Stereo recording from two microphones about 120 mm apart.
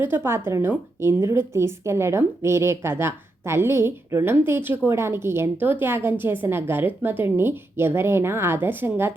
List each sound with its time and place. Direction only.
0.3 s a woman's voice: 20° right (ahead or behind)